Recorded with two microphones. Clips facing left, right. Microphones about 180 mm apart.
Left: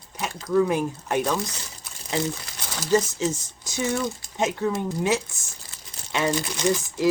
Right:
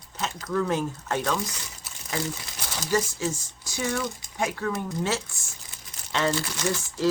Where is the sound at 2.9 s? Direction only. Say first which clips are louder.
Left 4 dB; 20° left (ahead or behind).